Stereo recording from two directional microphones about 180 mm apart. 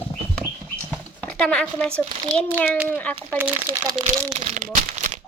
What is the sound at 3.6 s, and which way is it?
Speech, 30° right (ahead or behind).